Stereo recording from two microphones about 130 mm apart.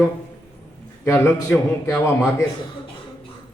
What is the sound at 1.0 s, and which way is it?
Speech, 20° left (ahead or behind).